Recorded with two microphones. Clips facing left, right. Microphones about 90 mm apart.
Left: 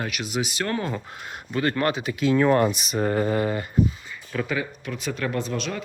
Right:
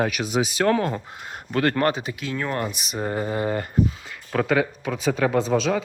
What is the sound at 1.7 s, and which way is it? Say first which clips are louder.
Speech: right 2 dB; 40° right (ahead or behind).